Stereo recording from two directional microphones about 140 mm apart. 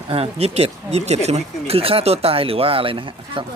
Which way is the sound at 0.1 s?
45° right (ahead or behind).